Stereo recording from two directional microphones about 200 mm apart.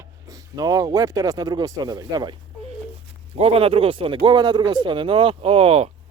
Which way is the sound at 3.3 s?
30° right (ahead or behind).